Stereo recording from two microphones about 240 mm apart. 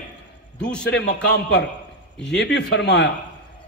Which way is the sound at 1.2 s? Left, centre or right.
Left.